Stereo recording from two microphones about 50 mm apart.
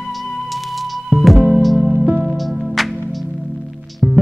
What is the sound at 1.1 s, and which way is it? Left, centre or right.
Music, centre.